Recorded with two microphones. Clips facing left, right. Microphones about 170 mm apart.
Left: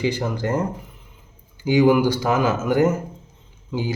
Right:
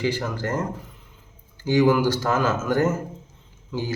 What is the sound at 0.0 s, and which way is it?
Mantra, 15° left (ahead or behind).